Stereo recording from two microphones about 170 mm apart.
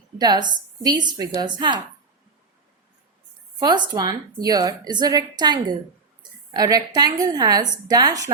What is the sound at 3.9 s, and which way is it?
A woman's voice, 20° right (ahead or behind).